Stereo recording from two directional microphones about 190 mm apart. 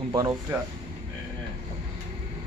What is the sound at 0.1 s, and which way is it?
Speech, 20° right (ahead or behind).